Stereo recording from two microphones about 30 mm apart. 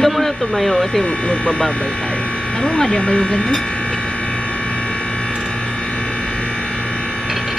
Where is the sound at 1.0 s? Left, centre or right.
Left.